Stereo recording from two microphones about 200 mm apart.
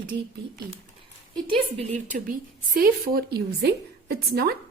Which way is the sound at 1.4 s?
25° right (ahead or behind).